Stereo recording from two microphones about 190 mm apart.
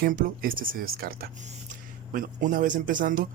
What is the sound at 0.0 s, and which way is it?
Speech, 50° right (ahead or behind).